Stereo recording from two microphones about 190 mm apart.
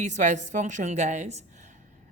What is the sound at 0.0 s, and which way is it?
Speech, 40° right (ahead or behind).